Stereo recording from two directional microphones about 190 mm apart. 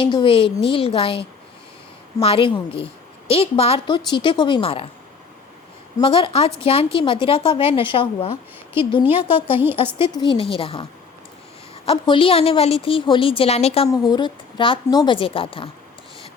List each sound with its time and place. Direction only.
0.0 s a woman's voice: 25° left (ahead or behind)
6.0 s a woman's voice: 30° left (ahead or behind)
9.5 s a woman's voice: 10° right (ahead or behind)
10.0 s a woman's voice: 25° left (ahead or behind)
11.9 s a woman's voice: 25° left (ahead or behind)
13.8 s a woman's voice: 20° left (ahead or behind)